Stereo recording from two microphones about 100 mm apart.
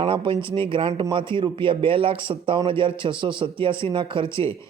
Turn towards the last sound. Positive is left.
turn(degrees=-55)  # may be behind; listen again after turning